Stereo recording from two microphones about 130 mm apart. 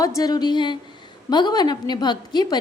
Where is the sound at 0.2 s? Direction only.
30° left (ahead or behind).